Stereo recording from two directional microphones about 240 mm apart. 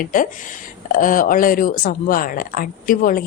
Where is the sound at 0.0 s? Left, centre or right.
Left.